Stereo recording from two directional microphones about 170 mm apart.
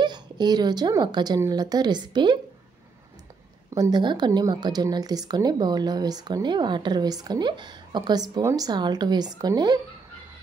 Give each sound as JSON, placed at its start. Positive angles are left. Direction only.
{"t": 0.0, "sound": "a woman's voice", "side_deg": -25}
{"t": 3.7, "sound": "a woman's voice", "side_deg": -25}